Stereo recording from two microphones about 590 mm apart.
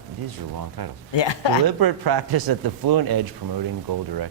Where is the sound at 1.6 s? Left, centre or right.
Right.